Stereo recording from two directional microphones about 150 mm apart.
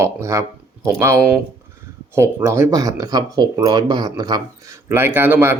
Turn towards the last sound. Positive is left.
turn(degrees=-15)  # may be behind; listen again after turning